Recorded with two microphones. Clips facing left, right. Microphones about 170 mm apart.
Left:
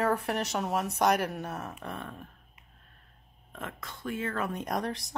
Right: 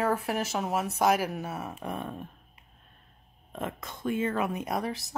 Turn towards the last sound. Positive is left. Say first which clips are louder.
# right 1 dB
turn(degrees=-5)  # may be behind; listen again after turning